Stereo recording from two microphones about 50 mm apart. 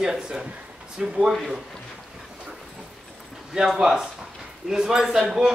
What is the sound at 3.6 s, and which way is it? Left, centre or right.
Speech, centre.